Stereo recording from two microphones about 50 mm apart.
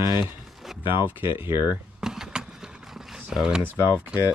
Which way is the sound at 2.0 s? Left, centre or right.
Centre.